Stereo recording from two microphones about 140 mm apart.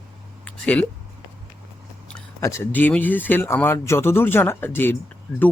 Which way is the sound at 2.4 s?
15° left (ahead or behind).